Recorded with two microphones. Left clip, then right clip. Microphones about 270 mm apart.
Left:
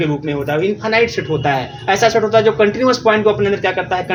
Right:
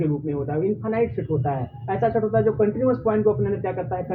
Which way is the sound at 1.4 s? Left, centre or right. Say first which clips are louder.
Left 11 dB; left.